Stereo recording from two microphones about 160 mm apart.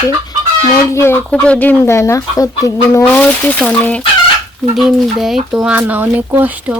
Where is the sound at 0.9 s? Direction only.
15° left (ahead or behind).